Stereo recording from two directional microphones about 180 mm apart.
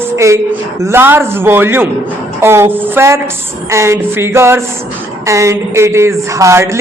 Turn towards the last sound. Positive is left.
turn(degrees=-15)  # may be behind; listen again after turning